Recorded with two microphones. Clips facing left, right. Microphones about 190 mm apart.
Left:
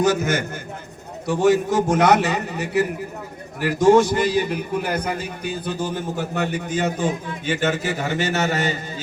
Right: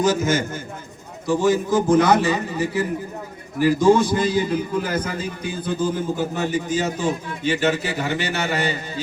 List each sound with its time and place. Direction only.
0.0 s a man's voice: 60° left (ahead or behind); by 8.7 s 45° left (ahead or behind)